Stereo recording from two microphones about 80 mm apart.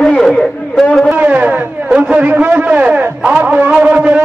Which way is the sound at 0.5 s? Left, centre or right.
Centre.